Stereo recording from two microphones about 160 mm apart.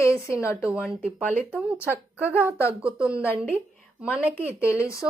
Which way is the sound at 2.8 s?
5° right (ahead or behind).